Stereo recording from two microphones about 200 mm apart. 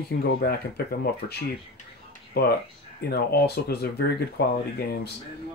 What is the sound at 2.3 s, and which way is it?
Speech, 50° left (ahead or behind).